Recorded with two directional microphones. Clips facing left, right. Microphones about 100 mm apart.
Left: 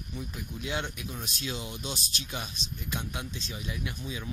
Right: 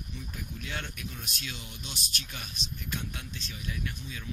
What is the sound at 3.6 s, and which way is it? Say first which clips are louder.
Speech: left 1 dB; 15° left (ahead or behind).